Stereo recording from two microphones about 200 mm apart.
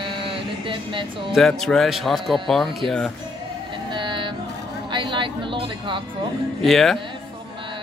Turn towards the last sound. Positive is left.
turn(degrees=0)  # may be behind; listen again after turning